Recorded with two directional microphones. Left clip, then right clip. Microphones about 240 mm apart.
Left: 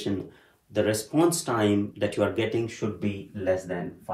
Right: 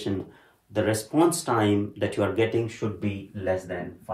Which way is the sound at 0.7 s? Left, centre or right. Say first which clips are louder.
Even; centre.